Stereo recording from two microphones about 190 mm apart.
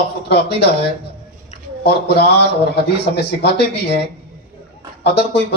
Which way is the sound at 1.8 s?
60° left (ahead or behind).